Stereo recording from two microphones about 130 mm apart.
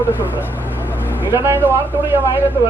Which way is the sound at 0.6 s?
15° right (ahead or behind).